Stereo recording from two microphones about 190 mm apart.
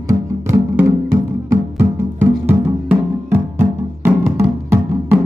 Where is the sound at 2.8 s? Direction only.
10° right (ahead or behind).